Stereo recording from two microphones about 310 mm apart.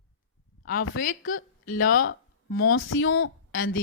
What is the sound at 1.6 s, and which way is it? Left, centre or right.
Speech, left.